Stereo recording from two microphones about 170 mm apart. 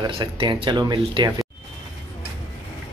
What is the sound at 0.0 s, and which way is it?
Speech, 30° right (ahead or behind).